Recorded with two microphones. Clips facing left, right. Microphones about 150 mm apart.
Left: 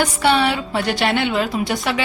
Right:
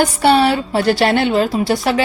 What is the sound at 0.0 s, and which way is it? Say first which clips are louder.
A woman's voice: right 4 dB; 35° right (ahead or behind).